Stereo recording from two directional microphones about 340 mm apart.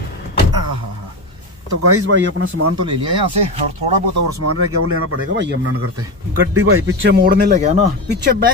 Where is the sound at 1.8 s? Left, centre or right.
Right.